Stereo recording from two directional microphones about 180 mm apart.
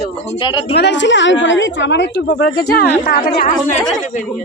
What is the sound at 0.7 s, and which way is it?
A woman's voice, 70° left (ahead or behind).